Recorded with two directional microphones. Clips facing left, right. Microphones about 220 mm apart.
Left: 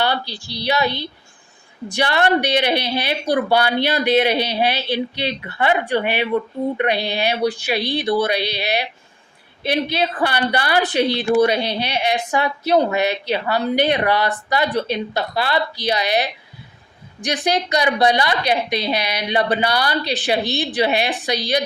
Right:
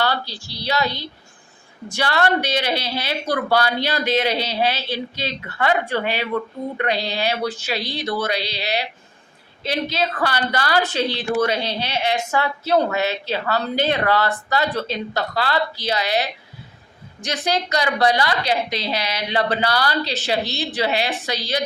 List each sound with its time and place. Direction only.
0.0 s a woman's voice: 15° left (ahead or behind)
1.9 s a woman's voice: 15° left (ahead or behind)